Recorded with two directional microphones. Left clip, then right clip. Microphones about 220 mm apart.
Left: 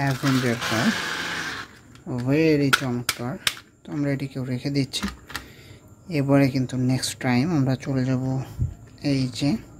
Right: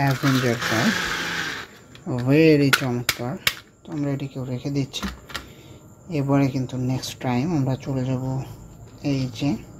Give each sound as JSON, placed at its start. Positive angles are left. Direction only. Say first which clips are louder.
{"t": 0.0, "sound": "speech", "louder": "right 2 dB", "side_deg": 0}
{"t": 3.1, "sound": "speech", "louder": "right 3 dB", "side_deg": 10}
{"t": 6.0, "sound": "speech", "louder": "left 2 dB", "side_deg": 20}